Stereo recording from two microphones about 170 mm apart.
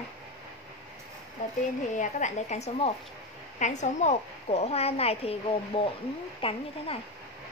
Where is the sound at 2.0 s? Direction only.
45° left (ahead or behind).